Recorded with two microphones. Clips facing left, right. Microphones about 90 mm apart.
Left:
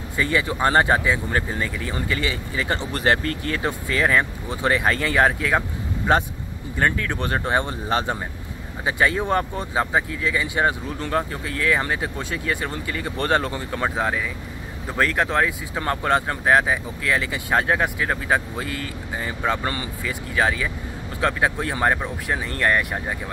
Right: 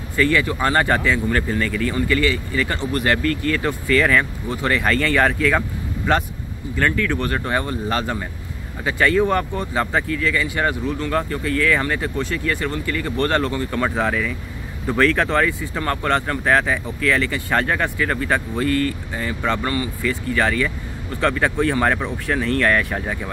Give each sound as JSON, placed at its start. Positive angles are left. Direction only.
{"t": 0.2, "sound": "speech", "side_deg": 20}
{"t": 6.8, "sound": "speech", "side_deg": 25}
{"t": 20.1, "sound": "speech", "side_deg": 15}